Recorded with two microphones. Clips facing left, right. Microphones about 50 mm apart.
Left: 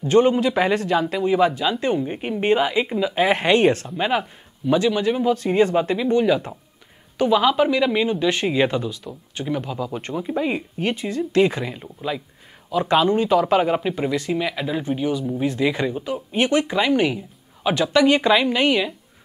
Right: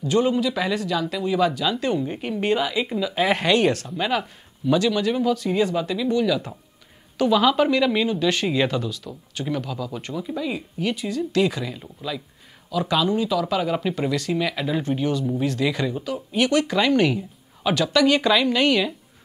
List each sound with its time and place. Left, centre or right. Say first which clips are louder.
0.0 s speech: left 4 dB; left
5.3 s speech: left 4 dB; left
7.2 s speech: left 1 dB; centre
8.1 s speech: left 1 dB; left
13.7 s speech: left 1 dB; centre